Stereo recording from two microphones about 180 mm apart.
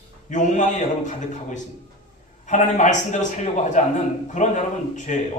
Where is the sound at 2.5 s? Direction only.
45° left (ahead or behind).